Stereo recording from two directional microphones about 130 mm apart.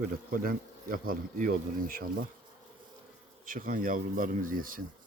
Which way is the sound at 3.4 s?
90° right.